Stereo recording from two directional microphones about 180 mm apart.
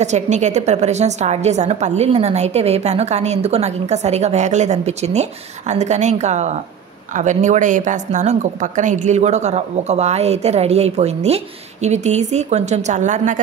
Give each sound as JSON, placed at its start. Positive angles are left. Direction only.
{"t": 0.0, "sound": "a woman's voice", "side_deg": -40}